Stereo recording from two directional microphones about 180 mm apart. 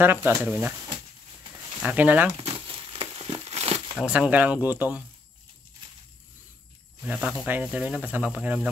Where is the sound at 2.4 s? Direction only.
35° right (ahead or behind).